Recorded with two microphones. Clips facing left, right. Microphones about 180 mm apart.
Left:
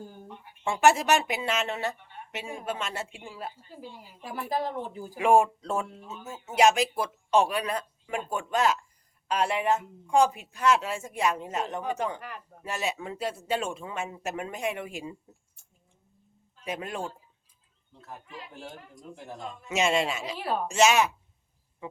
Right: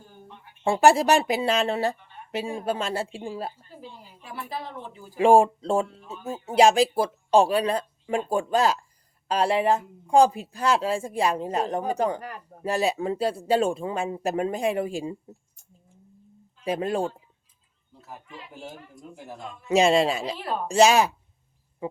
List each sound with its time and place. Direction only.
0.6 s speech: 35° right (ahead or behind)
3.8 s speech: 10° left (ahead or behind)
4.2 s speech: 40° left (ahead or behind)
5.1 s speech: 30° right (ahead or behind)
16.6 s speech: 35° right (ahead or behind)
17.9 s speech: 5° right (ahead or behind)
19.6 s speech: 35° right (ahead or behind)
20.4 s speech: 10° left (ahead or behind)
20.7 s speech: 35° right (ahead or behind)